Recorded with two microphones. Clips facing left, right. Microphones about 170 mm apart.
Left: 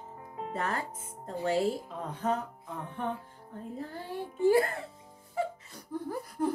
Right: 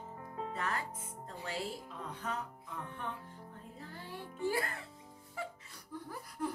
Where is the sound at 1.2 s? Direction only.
40° left (ahead or behind).